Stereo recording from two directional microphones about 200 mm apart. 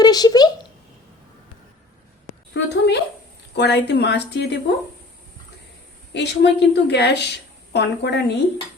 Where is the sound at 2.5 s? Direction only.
55° left (ahead or behind).